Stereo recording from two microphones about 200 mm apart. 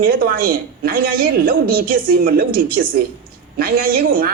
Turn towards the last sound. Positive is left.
turn(degrees=-45)  # may be behind; listen again after turning